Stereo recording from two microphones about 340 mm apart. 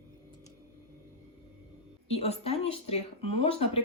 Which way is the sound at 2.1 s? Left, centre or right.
Centre.